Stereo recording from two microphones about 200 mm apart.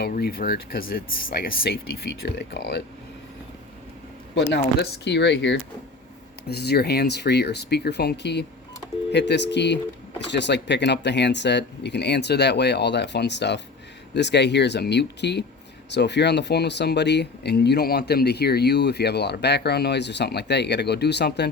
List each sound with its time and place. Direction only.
0.0 s speech: 50° left (ahead or behind)
2.2 s speech: 55° left (ahead or behind)
4.5 s speech: 60° left (ahead or behind)